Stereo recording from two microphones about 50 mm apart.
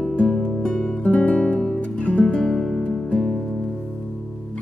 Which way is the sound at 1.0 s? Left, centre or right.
Left.